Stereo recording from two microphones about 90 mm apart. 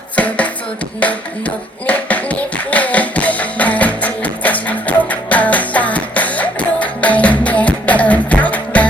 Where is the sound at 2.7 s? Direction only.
15° left (ahead or behind).